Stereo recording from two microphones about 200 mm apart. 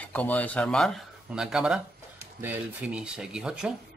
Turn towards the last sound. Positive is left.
turn(degrees=-5)  # may be behind; listen again after turning